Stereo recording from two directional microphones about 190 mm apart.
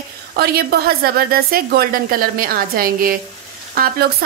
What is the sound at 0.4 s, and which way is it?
A woman's voice, 55° right (ahead or behind).